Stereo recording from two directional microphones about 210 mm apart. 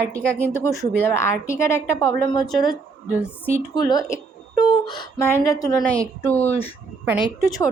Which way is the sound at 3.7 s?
20° left (ahead or behind).